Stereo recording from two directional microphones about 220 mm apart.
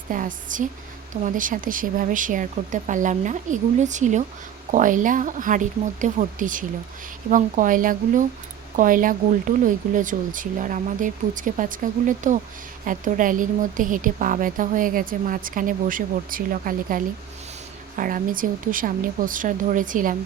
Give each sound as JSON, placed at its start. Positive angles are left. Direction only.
{"t": 0.1, "sound": "a woman's voice", "side_deg": -35}